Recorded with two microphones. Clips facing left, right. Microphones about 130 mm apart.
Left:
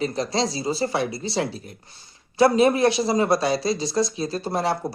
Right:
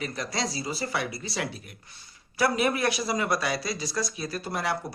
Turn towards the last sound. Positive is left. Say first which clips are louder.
# left 6 dB
turn(degrees=30)  # may be behind; listen again after turning